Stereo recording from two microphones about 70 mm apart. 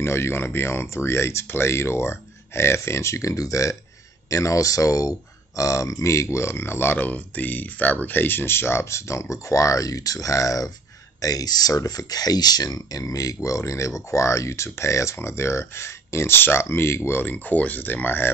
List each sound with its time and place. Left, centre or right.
0.0 s speech: left